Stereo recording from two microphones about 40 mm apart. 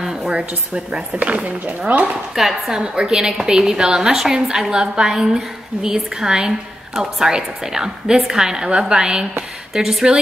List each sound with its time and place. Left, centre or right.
0.0 s a sound: centre
0.7 s a woman's voice: right
1.2 s speech: right
2.3 s speech: centre
2.7 s a woman's voice: centre
9.8 s a woman's voice: centre